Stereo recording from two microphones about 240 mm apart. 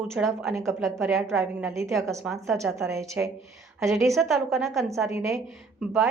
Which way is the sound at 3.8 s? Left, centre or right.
Centre.